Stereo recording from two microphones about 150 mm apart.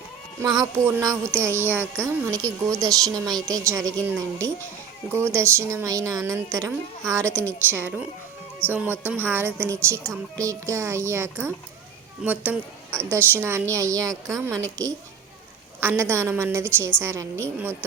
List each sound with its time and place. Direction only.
0.4 s a woman's voice: 25° right (ahead or behind)
15.8 s speech: 15° right (ahead or behind)